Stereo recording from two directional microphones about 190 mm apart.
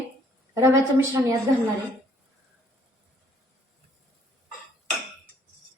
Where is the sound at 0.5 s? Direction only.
15° right (ahead or behind).